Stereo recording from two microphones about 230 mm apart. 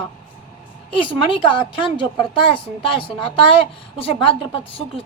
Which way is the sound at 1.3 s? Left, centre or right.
Left.